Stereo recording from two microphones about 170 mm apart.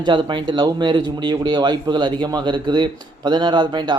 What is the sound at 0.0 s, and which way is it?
Speech, 25° right (ahead or behind).